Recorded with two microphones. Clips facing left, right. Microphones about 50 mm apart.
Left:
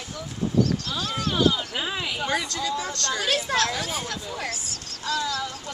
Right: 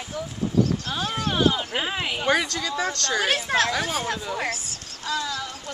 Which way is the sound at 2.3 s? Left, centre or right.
Right.